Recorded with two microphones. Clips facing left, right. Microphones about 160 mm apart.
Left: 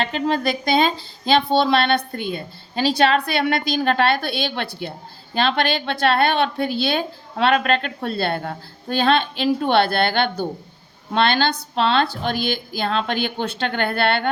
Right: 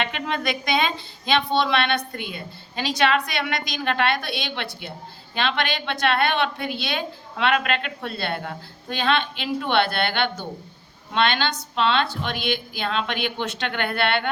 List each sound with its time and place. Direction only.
0.0 s a woman's voice: 35° left (ahead or behind)